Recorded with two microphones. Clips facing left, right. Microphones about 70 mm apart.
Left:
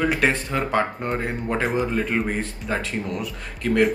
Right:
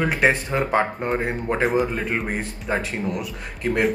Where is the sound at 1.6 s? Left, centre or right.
Centre.